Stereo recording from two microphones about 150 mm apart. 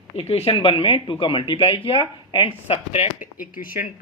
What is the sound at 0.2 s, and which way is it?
Speech, 40° left (ahead or behind).